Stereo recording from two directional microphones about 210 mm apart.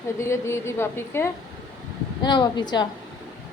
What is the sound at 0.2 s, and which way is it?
Speech, 10° left (ahead or behind).